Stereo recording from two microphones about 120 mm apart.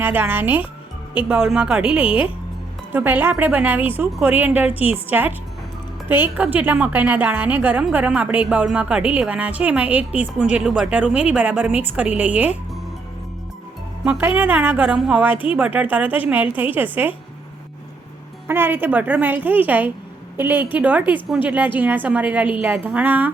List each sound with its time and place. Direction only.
0.0 s a woman's voice: 15° right (ahead or behind)
14.0 s a woman's voice: 10° right (ahead or behind)
14.9 s a woman's voice: 5° right (ahead or behind)
15.4 s a woman's voice: 15° right (ahead or behind)
18.4 s a woman's voice: 20° right (ahead or behind)